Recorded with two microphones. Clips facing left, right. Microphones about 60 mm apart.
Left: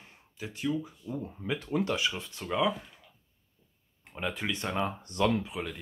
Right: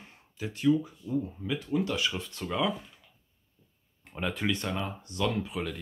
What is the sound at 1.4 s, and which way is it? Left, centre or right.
Speech, left.